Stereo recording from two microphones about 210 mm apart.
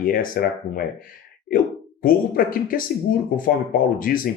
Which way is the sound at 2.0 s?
40° left (ahead or behind).